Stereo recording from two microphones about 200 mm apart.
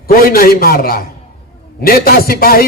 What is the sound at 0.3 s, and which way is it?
Speech, 45° left (ahead or behind).